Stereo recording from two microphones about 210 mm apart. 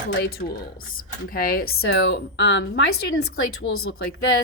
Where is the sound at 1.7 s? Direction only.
75° left (ahead or behind).